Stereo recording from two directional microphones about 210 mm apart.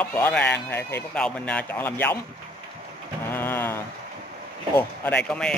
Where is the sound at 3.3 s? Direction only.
10° left (ahead or behind).